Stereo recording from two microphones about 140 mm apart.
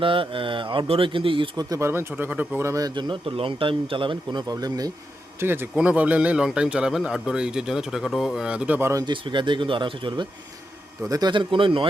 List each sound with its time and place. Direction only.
0.0 s a man's voice: 40° right (ahead or behind)
1.7 s speech: 20° right (ahead or behind)
5.4 s a man's voice: 15° right (ahead or behind)
8.9 s speech: 25° right (ahead or behind)
9.1 s a man's voice: 35° right (ahead or behind)